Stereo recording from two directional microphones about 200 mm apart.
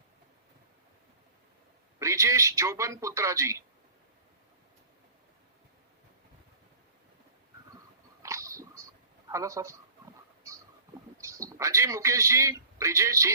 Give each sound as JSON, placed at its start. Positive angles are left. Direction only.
{"t": 2.0, "sound": "a man's voice", "side_deg": -15}
{"t": 8.2, "sound": "a sound", "side_deg": -15}
{"t": 9.3, "sound": "speech", "side_deg": -15}
{"t": 11.2, "sound": "a man's voice", "side_deg": -15}